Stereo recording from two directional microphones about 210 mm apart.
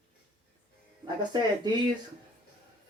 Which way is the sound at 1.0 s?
20° right (ahead or behind).